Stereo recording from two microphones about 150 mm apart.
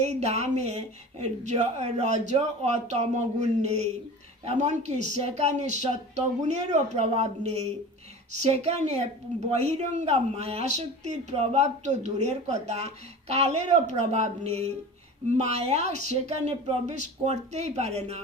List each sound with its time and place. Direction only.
0.0 s a woman's voice: 50° right (ahead or behind)